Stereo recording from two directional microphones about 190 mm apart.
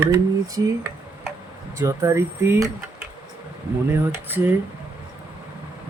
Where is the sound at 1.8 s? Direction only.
15° right (ahead or behind).